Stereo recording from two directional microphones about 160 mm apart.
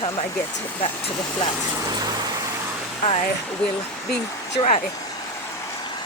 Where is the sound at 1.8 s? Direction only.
25° right (ahead or behind).